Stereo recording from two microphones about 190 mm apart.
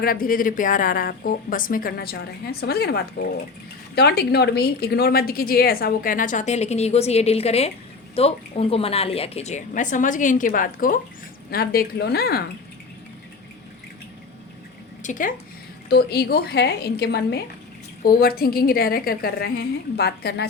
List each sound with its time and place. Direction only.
0.0 s a woman's voice: 50° left (ahead or behind)
15.0 s speech: 45° left (ahead or behind)
15.9 s a woman's voice: 60° left (ahead or behind)